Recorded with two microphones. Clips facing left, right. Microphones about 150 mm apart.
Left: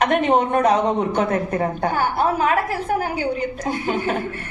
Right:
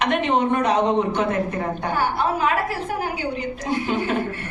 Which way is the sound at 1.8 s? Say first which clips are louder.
Left 1 dB; 45° left (ahead or behind).